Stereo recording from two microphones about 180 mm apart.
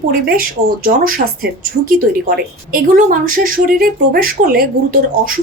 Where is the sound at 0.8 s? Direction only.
55° right (ahead or behind).